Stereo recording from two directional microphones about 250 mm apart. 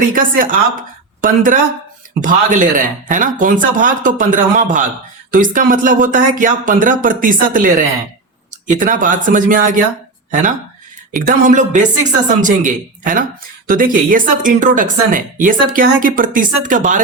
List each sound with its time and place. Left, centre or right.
0.0 s a man's voice: right
11.1 s a man's voice: right